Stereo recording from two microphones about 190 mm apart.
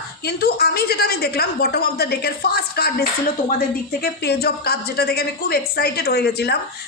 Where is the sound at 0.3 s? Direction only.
55° left (ahead or behind).